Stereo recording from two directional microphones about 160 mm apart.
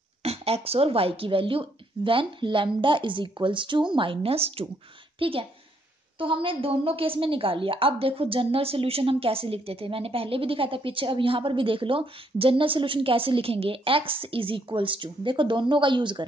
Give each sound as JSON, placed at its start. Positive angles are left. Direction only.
{"t": 0.2, "sound": "a woman's voice", "side_deg": -40}